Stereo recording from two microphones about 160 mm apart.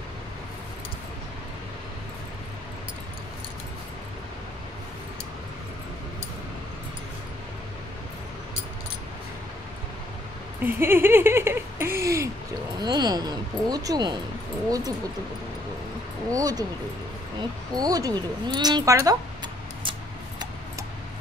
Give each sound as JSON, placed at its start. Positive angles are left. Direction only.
{"t": 10.6, "sound": "speech", "side_deg": -15}
{"t": 16.3, "sound": "speech", "side_deg": -20}
{"t": 19.8, "sound": "a sound", "side_deg": -30}